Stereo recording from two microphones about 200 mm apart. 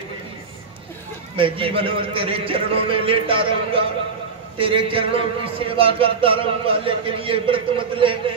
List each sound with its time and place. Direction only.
1.3 s a man's voice: 25° right (ahead or behind)